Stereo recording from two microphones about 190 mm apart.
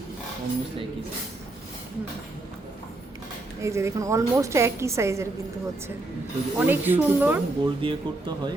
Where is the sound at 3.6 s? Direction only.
15° right (ahead or behind).